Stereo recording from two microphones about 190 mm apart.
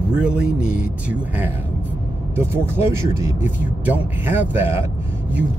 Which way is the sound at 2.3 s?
10° right (ahead or behind).